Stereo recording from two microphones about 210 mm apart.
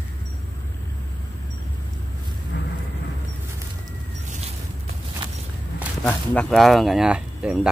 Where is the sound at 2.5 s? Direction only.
55° left (ahead or behind).